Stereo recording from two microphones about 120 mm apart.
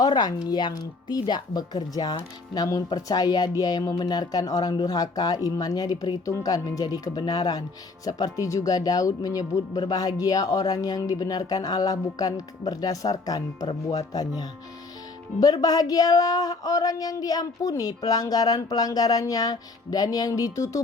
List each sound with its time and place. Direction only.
0.0 s speech: 35° left (ahead or behind)